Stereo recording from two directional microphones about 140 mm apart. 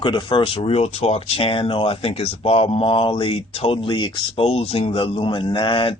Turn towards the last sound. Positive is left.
turn(degrees=40)  # may be behind; listen again after turning